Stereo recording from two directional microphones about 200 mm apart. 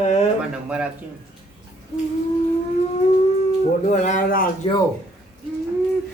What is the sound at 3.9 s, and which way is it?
Speech, 35° left (ahead or behind).